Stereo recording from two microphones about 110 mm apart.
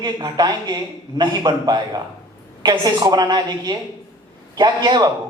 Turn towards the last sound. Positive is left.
turn(degrees=-40)  # may be behind; listen again after turning